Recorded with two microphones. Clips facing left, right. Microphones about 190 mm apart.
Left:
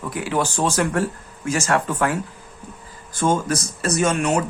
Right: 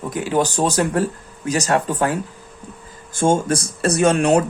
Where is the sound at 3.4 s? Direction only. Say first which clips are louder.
Right 4 dB; 30° right (ahead or behind).